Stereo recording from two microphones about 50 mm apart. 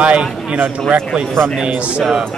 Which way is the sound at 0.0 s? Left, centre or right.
Right.